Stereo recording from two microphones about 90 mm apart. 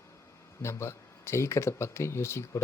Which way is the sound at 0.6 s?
30° left (ahead or behind).